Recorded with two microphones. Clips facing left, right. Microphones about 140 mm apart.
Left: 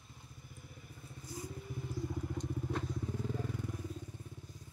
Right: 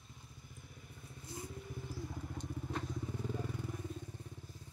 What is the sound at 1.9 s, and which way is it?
Vehicle, centre (ahead or behind).